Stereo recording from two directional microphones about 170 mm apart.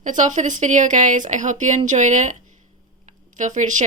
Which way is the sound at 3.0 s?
45° right (ahead or behind).